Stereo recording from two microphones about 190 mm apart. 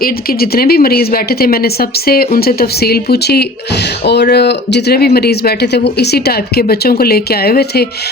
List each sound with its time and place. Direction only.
0.0 s speech: 55° left (ahead or behind)